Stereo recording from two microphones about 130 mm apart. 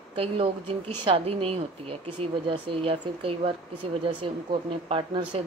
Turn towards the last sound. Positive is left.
turn(degrees=-40)  # may be behind; listen again after turning